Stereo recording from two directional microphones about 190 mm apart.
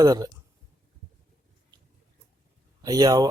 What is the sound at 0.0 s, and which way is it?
Speech, 20° right (ahead or behind).